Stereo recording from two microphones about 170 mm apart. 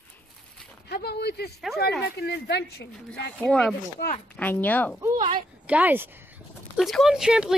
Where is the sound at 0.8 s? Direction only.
70° left (ahead or behind).